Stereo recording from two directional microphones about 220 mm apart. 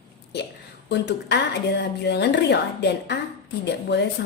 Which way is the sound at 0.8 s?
50° left (ahead or behind).